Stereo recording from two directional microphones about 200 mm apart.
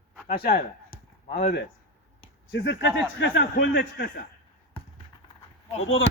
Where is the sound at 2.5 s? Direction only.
65° left (ahead or behind).